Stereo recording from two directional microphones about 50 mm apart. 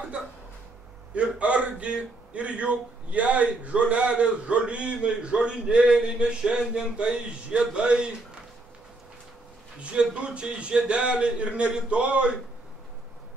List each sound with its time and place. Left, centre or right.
1.1 s a man's voice: right
9.8 s a man's voice: right